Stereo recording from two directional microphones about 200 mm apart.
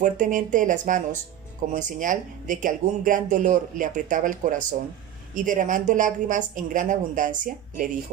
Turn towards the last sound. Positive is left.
turn(degrees=-40)  # may be behind; listen again after turning